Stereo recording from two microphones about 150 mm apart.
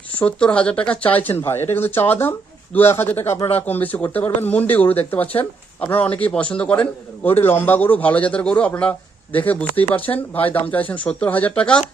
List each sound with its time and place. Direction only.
0.2 s a man's voice: 5° left (ahead or behind)
10.1 s speech: 25° left (ahead or behind)
10.5 s a man's voice: 10° left (ahead or behind)